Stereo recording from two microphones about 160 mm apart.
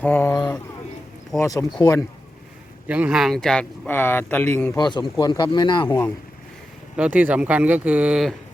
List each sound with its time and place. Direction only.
0.0 s speech: 10° left (ahead or behind)
1.4 s speech: 20° left (ahead or behind)
2.8 s speech: 10° right (ahead or behind); by 4.8 s 10° left (ahead or behind)
4.8 s speech: 25° left (ahead or behind)
6.9 s speech: 10° right (ahead or behind)